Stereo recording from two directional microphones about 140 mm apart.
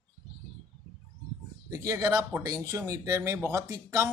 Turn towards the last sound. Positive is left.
turn(degrees=-25)  # may be behind; listen again after turning